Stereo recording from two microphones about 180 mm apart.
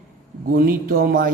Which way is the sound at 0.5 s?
55° right (ahead or behind).